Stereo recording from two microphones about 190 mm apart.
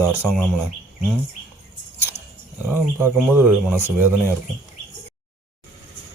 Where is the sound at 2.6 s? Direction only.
10° right (ahead or behind).